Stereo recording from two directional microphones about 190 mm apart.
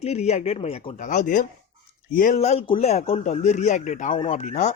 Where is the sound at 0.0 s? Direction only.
35° left (ahead or behind).